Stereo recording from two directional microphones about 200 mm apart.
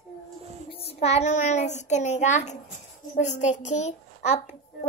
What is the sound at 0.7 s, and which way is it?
A child's voice, 30° left (ahead or behind).